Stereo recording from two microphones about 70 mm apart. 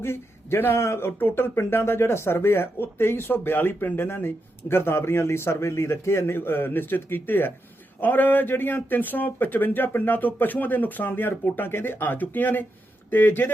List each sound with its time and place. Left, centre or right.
0.0 s a man's voice: left